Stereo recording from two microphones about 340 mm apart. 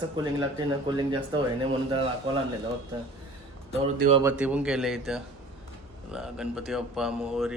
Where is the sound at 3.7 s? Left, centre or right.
Centre.